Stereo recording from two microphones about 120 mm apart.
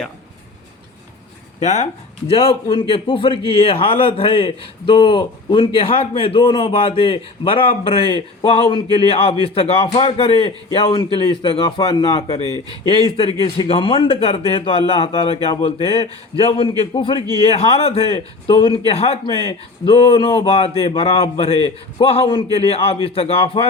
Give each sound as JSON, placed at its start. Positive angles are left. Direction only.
{"t": 1.6, "sound": "a man's voice", "side_deg": 70}
{"t": 17.4, "sound": "a man's voice", "side_deg": 55}